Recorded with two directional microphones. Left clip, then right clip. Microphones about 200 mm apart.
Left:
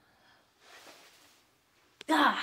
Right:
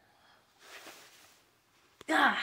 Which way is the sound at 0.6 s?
65° right (ahead or behind).